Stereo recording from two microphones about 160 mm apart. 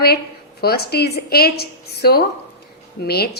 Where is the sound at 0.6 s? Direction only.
80° left.